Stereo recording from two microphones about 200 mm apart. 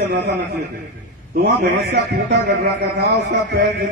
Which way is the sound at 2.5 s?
60° right (ahead or behind).